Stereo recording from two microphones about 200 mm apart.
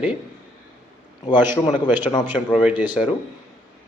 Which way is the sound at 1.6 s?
25° left (ahead or behind).